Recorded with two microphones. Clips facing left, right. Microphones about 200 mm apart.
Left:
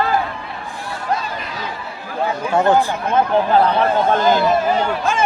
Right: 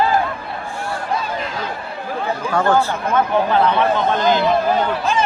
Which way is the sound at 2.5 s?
20° left (ahead or behind).